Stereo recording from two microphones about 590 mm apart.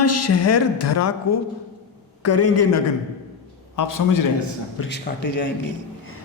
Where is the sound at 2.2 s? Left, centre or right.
Left.